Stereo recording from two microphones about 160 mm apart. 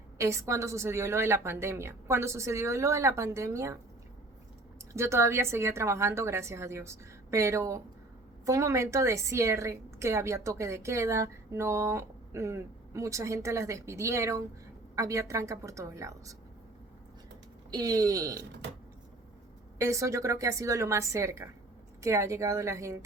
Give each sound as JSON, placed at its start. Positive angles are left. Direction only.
{"t": 0.2, "sound": "a woman's voice", "side_deg": -20}
{"t": 4.9, "sound": "a woman's voice", "side_deg": -15}
{"t": 17.7, "sound": "a woman's voice", "side_deg": -25}
{"t": 19.8, "sound": "a woman's voice", "side_deg": -20}